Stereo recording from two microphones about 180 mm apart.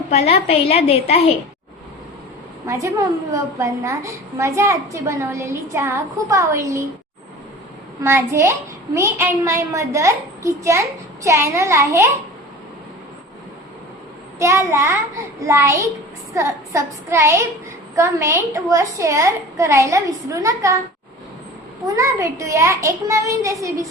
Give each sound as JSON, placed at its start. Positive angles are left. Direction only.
{"t": 0.1, "sound": "a woman's voice", "side_deg": 35}
{"t": 2.6, "sound": "a woman's voice", "side_deg": -15}
{"t": 8.0, "sound": "a woman's voice", "side_deg": -15}
{"t": 14.3, "sound": "a woman's voice", "side_deg": -15}
{"t": 21.8, "sound": "a woman's voice", "side_deg": -15}